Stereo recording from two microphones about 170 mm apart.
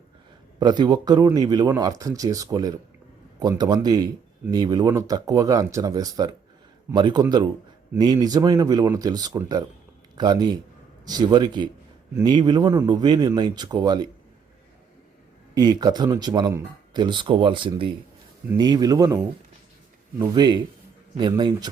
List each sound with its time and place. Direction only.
0.6 s speech: 25° right (ahead or behind)
15.5 s speech: 25° right (ahead or behind)